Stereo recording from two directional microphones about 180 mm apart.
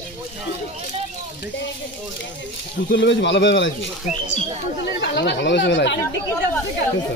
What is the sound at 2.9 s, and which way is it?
Speech, 90° left.